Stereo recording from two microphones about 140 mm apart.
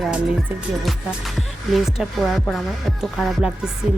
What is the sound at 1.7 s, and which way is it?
Speech, centre (ahead or behind).